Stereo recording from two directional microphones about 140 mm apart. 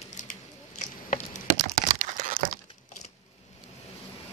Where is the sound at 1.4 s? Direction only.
65° right (ahead or behind).